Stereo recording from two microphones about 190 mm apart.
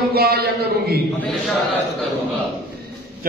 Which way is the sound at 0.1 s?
55° right (ahead or behind).